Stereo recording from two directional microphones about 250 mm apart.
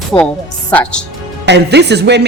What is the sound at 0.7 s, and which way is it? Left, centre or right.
Speech, centre.